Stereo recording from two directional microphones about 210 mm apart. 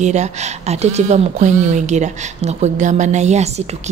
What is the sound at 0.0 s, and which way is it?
Speech, 35° right (ahead or behind).